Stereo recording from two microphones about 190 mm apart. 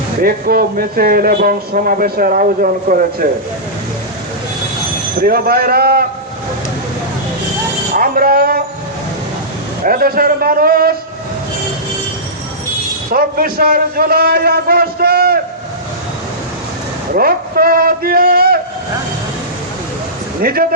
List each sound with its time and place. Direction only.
0.2 s speech: 50° right (ahead or behind)
5.2 s speech: 50° right (ahead or behind)
7.9 s speech: 50° right (ahead or behind)
9.8 s speech: 50° right (ahead or behind)
13.1 s speech: 50° right (ahead or behind)
17.2 s speech: 50° right (ahead or behind)
20.4 s speech: 50° right (ahead or behind)